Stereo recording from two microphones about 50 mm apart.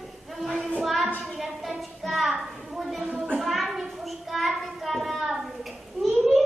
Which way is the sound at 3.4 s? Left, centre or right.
Centre.